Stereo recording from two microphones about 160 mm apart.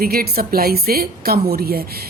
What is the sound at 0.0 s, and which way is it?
A woman's voice, 70° right (ahead or behind).